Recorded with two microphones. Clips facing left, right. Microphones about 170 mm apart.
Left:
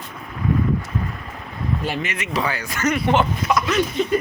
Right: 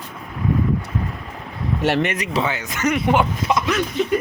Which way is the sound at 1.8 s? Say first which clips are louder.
Right 11 dB; 75° right (ahead or behind).